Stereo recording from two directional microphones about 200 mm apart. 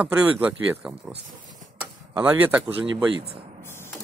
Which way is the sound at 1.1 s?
40° right (ahead or behind).